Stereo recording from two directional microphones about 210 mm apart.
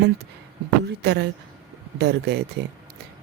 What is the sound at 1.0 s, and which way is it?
Speech, 55° right (ahead or behind).